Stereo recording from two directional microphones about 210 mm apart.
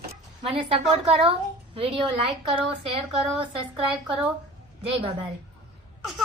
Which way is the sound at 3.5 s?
25° right (ahead or behind).